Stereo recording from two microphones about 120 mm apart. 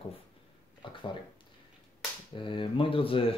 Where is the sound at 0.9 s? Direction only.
45° left (ahead or behind).